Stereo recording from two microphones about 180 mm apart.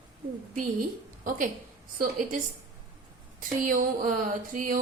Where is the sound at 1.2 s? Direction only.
50° right (ahead or behind).